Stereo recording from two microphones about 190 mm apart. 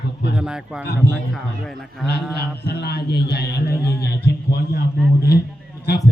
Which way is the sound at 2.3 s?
60° left (ahead or behind).